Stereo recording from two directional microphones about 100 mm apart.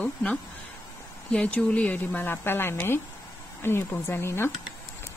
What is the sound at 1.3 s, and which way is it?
A woman's voice, 10° left (ahead or behind).